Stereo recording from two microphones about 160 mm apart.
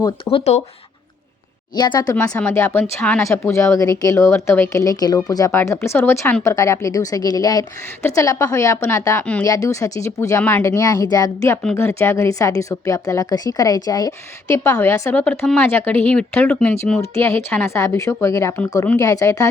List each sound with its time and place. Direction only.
0.3 s speech: 40° left (ahead or behind)
1.7 s speech: 25° left (ahead or behind); by 17.0 s 5° left (ahead or behind)
17.2 s speech: 15° left (ahead or behind)